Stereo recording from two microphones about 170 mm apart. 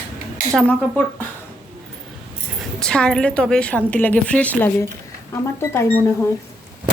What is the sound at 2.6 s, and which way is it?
A woman's voice, 5° left (ahead or behind).